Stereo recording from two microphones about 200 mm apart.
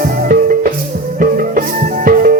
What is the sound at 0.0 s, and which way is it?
Music, 45° right (ahead or behind).